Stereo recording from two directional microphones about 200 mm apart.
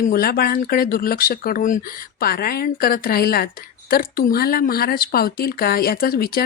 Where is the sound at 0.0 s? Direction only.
45° left (ahead or behind).